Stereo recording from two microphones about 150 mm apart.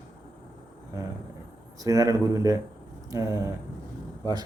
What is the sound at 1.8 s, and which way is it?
A man's voice, 20° right (ahead or behind).